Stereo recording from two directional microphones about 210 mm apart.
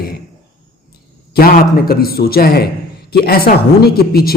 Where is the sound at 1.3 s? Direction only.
45° left (ahead or behind).